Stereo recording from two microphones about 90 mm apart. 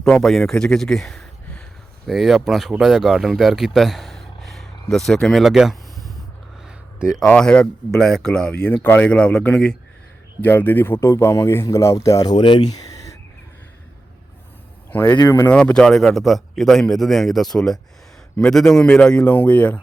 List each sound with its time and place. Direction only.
0.0 s a man's voice: 5° left (ahead or behind)
7.3 s speech: 10° left (ahead or behind); by 12.3 s 35° left (ahead or behind)
12.3 s speech: 60° left (ahead or behind)
14.8 s speech: 20° left (ahead or behind)
15.2 s speech: 35° left (ahead or behind)
15.4 s a man's voice: 10° left (ahead or behind)